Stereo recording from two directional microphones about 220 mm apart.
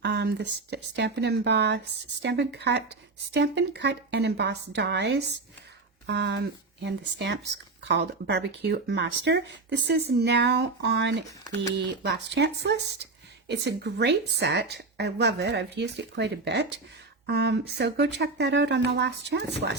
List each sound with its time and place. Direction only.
0.0 s speech: 50° right (ahead or behind)